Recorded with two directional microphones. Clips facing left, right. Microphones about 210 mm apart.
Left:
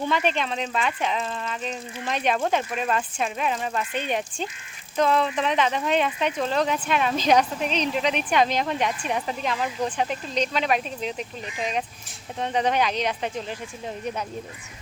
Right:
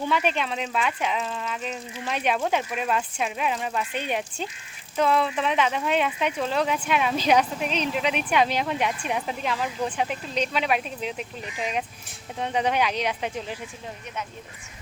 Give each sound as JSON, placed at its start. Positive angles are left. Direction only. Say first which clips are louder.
{"t": 0.1, "sound": "speech", "louder": "right 1 dB", "side_deg": -5}